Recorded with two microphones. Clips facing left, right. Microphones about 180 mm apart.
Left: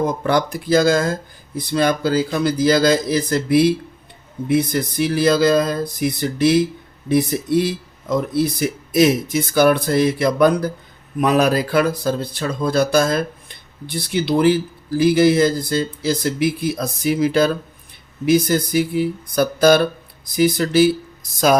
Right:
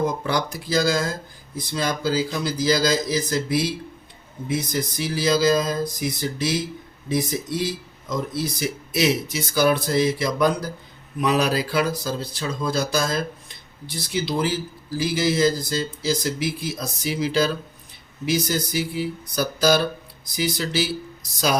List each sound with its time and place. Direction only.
0.0 s speech: 55° left (ahead or behind)